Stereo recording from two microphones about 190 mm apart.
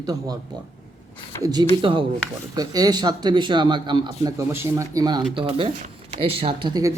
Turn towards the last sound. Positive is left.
turn(degrees=-25)  # may be behind; listen again after turning